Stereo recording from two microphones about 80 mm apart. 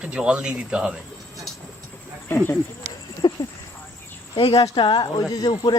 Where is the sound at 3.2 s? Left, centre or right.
Left.